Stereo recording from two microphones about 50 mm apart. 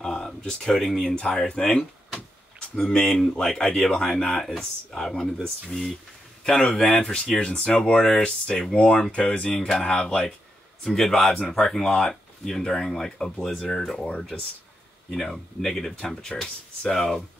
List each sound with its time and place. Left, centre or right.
0.0 s a sound: centre
0.5 s speech: centre
6.8 s speech: left
15.0 s speech: centre